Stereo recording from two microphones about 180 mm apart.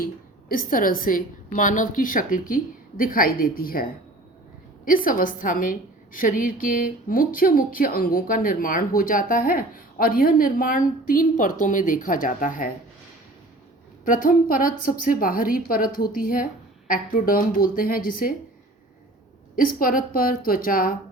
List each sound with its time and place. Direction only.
0.0 s speech: 55° left (ahead or behind)
4.9 s speech: 50° left (ahead or behind)
14.0 s speech: 50° left (ahead or behind)
19.5 s speech: 50° left (ahead or behind)